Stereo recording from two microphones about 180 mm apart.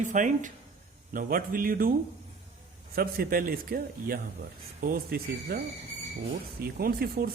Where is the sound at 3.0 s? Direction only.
55° right (ahead or behind).